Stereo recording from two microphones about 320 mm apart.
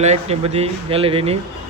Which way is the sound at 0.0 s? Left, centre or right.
Centre.